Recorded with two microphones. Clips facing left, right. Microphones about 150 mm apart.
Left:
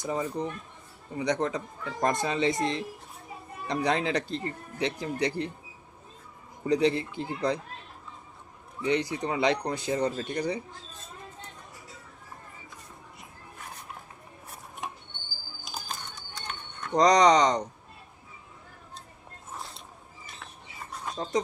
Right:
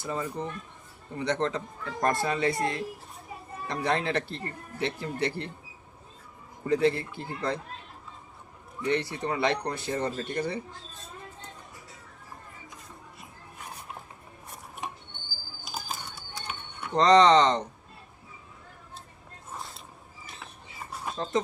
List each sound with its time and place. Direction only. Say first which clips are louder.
0.0 s speech: left 2 dB; 15° left (ahead or behind)
6.7 s speech: even; 20° left (ahead or behind)
8.8 s speech: left 1 dB; 15° left (ahead or behind)
14.8 s a sound: even; centre (ahead or behind)
16.9 s speech: right 1 dB; 15° left (ahead or behind)